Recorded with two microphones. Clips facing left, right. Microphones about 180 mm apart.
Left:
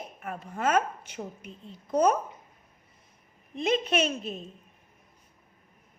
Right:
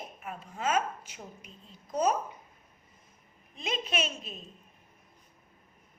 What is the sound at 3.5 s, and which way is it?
Speech, 60° left (ahead or behind).